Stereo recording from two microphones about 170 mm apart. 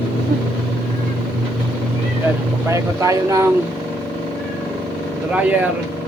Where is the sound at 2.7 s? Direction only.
20° right (ahead or behind).